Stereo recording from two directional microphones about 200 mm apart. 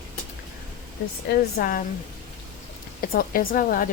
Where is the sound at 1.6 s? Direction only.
45° left (ahead or behind).